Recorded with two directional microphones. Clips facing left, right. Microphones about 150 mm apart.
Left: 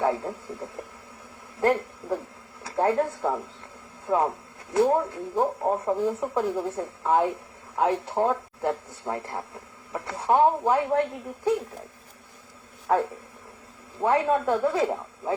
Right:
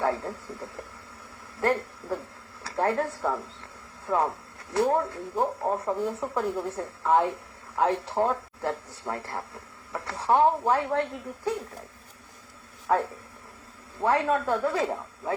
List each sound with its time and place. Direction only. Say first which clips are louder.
0.0 s speech: left 2 dB; 20° left (ahead or behind)
12.9 s speech: left 2 dB; 30° left (ahead or behind)
14.0 s speech: left 2 dB; 20° left (ahead or behind)